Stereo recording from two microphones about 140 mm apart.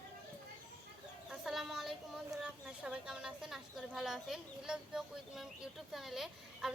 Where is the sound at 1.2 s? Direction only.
Centre (ahead or behind).